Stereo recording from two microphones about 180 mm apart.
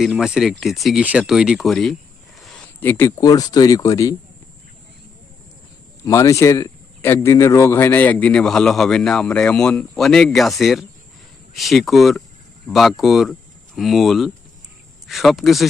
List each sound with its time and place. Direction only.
0.0 s speech: 5° right (ahead or behind); by 4.1 s 20° left (ahead or behind)
6.1 s speech: 15° left (ahead or behind); by 15.7 s centre (ahead or behind)